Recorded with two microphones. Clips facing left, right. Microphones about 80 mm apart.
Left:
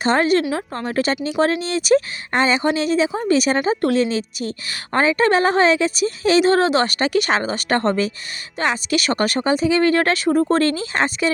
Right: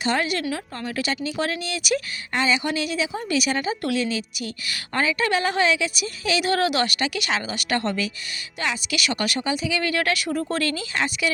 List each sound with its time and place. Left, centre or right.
0.0 s speech: left